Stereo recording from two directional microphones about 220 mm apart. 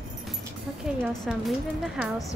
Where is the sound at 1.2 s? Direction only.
Centre (ahead or behind).